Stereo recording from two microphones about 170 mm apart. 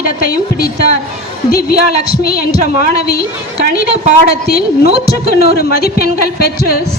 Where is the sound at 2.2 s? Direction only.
65° left (ahead or behind).